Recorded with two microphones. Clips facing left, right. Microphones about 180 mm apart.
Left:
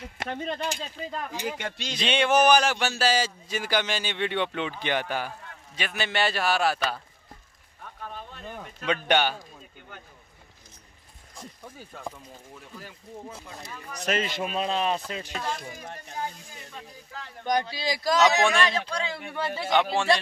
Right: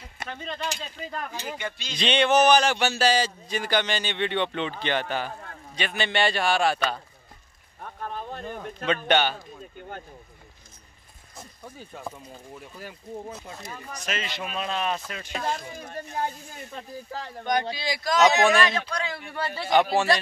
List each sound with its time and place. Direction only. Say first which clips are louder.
0.3 s a man's voice: left 2 dB; 50° left (ahead or behind)
1.1 s speech: left 2 dB; 15° left (ahead or behind)
1.6 s speech: left 1 dB; 70° left (ahead or behind)
2.0 s a man's voice: right 2 dB; 5° left (ahead or behind)
7.8 s a sound: right 5 dB; 50° right (ahead or behind)
8.8 s speech: right 1 dB; 10° left (ahead or behind)
11.6 s a man's voice: right 2 dB; 5° right (ahead or behind)
13.9 s a man's voice: left 6 dB; 55° left (ahead or behind)
14.5 s speech: left 1 dB; 30° left (ahead or behind)
16.7 s speech: right 7 dB; 35° right (ahead or behind)
17.5 s a man's voice: even; 35° left (ahead or behind); by 19.6 s 20° left (ahead or behind)
19.7 s a man's voice: right 3 dB; 5° right (ahead or behind)